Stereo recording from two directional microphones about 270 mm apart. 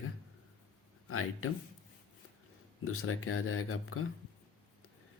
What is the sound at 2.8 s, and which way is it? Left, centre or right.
Speech, left.